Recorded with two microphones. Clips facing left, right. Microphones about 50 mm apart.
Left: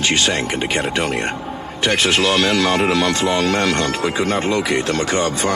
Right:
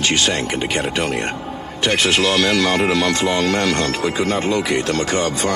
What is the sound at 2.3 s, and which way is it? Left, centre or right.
Speech, left.